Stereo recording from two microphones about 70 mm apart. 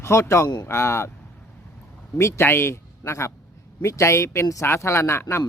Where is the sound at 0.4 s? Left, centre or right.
Left.